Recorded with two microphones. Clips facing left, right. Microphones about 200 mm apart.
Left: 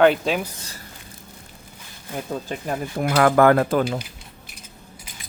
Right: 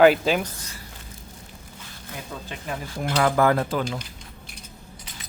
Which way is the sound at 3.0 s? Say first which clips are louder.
Left 5 dB; 60° left (ahead or behind).